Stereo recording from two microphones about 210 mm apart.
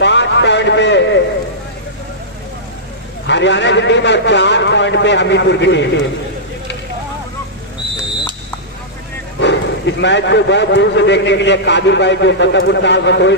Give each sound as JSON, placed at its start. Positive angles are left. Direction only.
{"t": 0.0, "sound": "a sound", "side_deg": 55}
{"t": 3.3, "sound": "a man's voice", "side_deg": 55}
{"t": 9.4, "sound": "a man's voice", "side_deg": 55}